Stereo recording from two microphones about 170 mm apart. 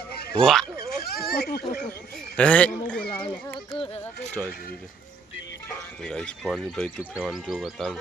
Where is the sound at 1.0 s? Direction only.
65° left (ahead or behind).